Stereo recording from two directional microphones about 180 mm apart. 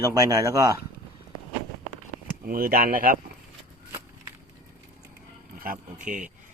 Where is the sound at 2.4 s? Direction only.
55° right (ahead or behind).